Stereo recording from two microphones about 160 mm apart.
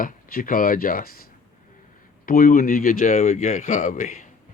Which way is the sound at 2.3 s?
60° left (ahead or behind).